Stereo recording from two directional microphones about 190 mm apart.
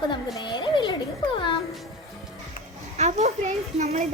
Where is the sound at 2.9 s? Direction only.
35° right (ahead or behind).